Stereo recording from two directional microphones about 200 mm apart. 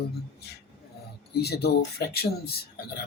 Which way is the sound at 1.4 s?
55° left (ahead or behind).